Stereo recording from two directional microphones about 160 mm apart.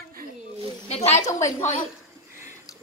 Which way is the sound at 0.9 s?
45° left (ahead or behind).